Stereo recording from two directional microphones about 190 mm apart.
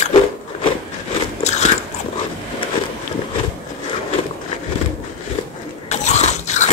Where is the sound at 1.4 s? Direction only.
35° left (ahead or behind).